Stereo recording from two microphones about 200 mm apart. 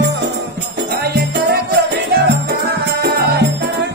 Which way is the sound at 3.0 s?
55° right (ahead or behind).